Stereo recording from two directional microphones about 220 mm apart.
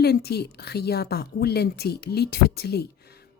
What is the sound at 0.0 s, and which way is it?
Speech, 45° left (ahead or behind).